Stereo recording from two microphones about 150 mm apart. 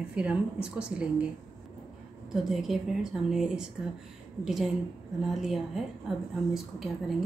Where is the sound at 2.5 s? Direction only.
Centre (ahead or behind).